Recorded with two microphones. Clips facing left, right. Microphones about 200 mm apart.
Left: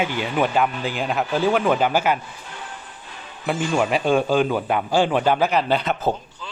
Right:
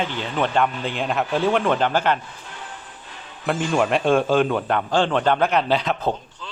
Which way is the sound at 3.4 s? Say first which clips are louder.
Right 1 dB; centre (ahead or behind).